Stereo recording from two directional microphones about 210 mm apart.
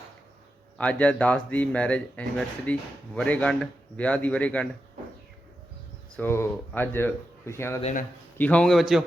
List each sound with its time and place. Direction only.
0.8 s a man's voice: 5° left (ahead or behind)
6.1 s speech: 10° left (ahead or behind)
7.8 s a man's voice: 35° left (ahead or behind)
8.4 s a man's voice: 5° left (ahead or behind)